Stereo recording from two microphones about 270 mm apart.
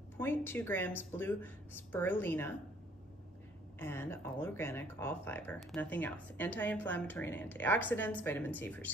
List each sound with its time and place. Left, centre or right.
0.2 s speech: centre
3.8 s speech: centre